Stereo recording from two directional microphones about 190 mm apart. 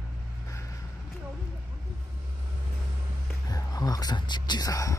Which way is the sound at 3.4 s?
20° left (ahead or behind).